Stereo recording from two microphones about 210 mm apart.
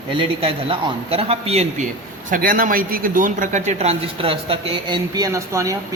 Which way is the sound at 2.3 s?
40° right (ahead or behind).